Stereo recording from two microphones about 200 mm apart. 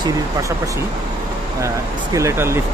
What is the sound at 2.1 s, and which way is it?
Speech, 15° right (ahead or behind).